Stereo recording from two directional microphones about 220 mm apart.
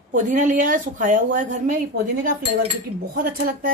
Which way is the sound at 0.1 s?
35° right (ahead or behind).